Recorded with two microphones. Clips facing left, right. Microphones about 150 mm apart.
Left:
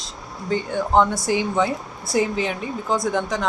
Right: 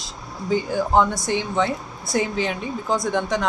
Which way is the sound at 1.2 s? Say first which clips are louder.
Left 2 dB; 5° left (ahead or behind).